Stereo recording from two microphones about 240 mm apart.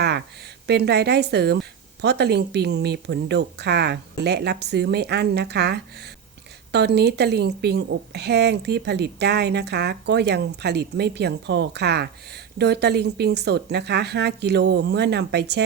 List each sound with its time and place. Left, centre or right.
0.7 s a woman's voice: right